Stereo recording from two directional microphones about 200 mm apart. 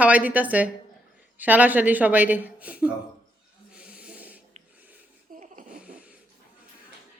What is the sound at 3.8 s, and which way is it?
Rub, 5° right (ahead or behind).